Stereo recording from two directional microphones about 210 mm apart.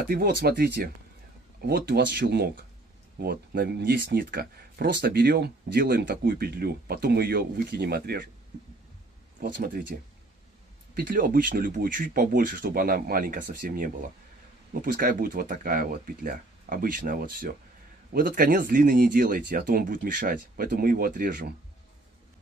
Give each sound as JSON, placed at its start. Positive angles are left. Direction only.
{"t": 0.0, "sound": "speech", "side_deg": -45}
{"t": 9.4, "sound": "speech", "side_deg": -45}
{"t": 11.0, "sound": "speech", "side_deg": -45}